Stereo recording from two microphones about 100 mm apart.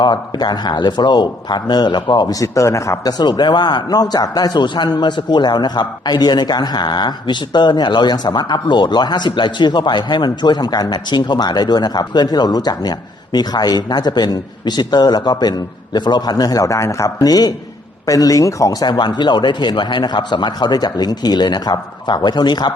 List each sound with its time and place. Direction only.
0.0 s a man's voice: 50° left (ahead or behind)